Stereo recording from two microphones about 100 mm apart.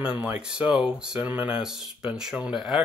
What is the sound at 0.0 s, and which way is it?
Speech, 10° right (ahead or behind).